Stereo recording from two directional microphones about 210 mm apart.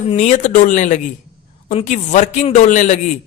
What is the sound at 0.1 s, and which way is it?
Speech, 35° left (ahead or behind).